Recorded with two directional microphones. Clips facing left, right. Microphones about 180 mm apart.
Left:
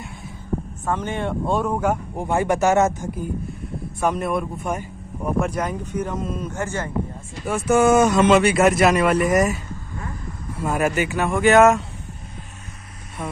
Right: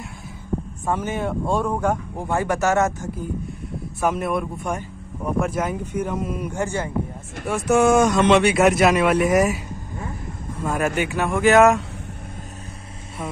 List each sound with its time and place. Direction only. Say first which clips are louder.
0.8 s speech: right 1 dB; 5° right (ahead or behind)
2.1 s speech: left 2 dB; 20° left (ahead or behind)
4.0 s speech: even; centre (ahead or behind)
7.4 s speech: even; centre (ahead or behind)
10.6 s speech: left 1 dB; 10° left (ahead or behind)
13.2 s speech: even; 5° right (ahead or behind)